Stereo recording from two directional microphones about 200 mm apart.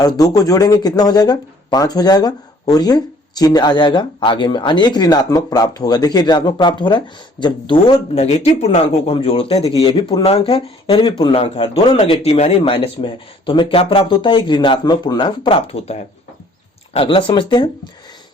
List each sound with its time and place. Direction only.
0.0 s speech: 20° left (ahead or behind)